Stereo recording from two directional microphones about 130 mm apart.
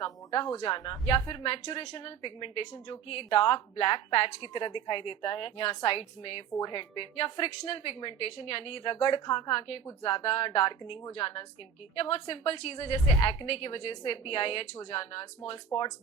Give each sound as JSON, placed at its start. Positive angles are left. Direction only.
{"t": 0.3, "sound": "speech", "side_deg": 35}
{"t": 1.8, "sound": "a woman's voice", "side_deg": 30}